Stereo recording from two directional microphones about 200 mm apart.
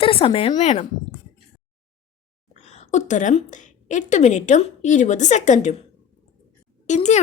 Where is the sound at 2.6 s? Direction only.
35° left (ahead or behind).